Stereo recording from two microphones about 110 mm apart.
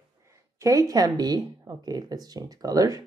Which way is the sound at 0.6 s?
30° right (ahead or behind).